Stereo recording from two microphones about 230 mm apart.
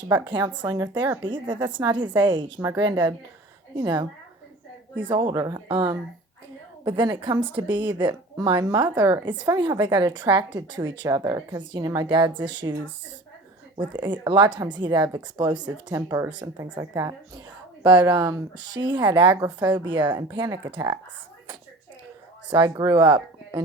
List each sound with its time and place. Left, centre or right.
0.3 s speech: centre
13.9 s speech: centre
22.4 s speech: right
23.1 s a sound: right